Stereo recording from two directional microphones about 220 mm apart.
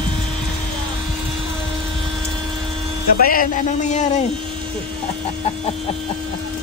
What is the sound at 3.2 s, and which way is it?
Speech, 40° left (ahead or behind).